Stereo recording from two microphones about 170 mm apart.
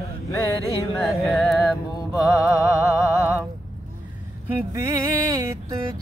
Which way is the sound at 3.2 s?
5° right (ahead or behind).